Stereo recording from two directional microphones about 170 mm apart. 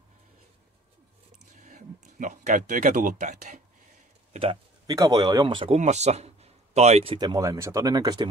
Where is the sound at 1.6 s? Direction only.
50° right (ahead or behind).